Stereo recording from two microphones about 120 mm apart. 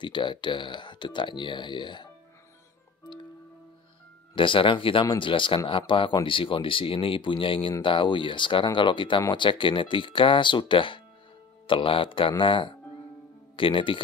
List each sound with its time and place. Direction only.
0.0 s speech: 40° left (ahead or behind)
4.4 s speech: 45° left (ahead or behind)